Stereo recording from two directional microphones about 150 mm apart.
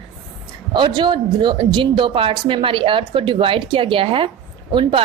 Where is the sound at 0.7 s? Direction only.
30° right (ahead or behind).